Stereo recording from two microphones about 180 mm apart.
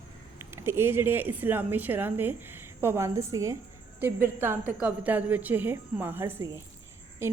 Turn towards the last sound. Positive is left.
turn(degrees=-15)  # may be behind; listen again after turning